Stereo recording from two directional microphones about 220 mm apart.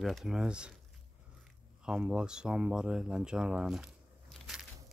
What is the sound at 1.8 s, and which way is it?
Speech, 5° right (ahead or behind).